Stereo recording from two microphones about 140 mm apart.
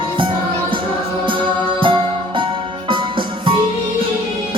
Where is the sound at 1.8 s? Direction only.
35° right (ahead or behind).